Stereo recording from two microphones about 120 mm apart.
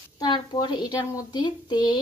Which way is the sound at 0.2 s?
35° left (ahead or behind).